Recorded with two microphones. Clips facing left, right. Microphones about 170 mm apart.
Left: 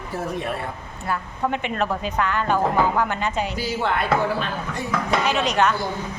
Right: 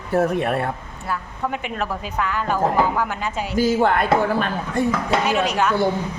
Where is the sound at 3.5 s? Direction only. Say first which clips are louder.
Right 7 dB; 45° right (ahead or behind).